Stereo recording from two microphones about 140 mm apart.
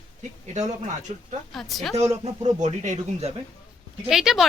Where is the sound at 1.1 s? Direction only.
55° right (ahead or behind).